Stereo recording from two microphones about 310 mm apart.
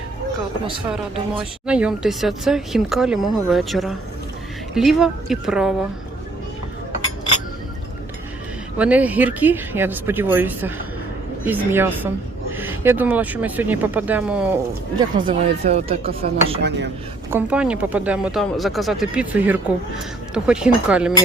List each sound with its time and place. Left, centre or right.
1.6 s speech: centre
8.8 s speech: centre
14.9 s speech: centre
17.3 s speech: centre